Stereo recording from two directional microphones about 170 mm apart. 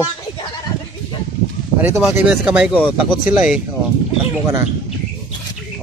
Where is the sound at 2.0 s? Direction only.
5° right (ahead or behind).